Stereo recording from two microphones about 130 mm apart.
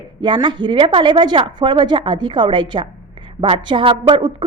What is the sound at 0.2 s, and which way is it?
Speech, 35° right (ahead or behind).